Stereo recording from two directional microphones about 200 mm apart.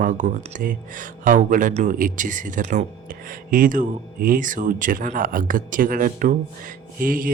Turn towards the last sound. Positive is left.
turn(degrees=-45)  # may be behind; listen again after turning